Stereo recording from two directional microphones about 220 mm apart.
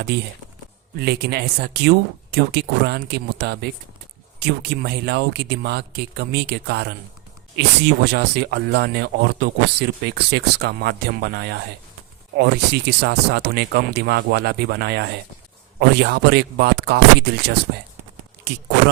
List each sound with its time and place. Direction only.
0.1 s speech: 50° right (ahead or behind)